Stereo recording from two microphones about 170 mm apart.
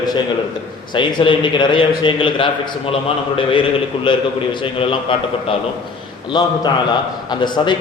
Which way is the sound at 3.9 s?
30° left (ahead or behind).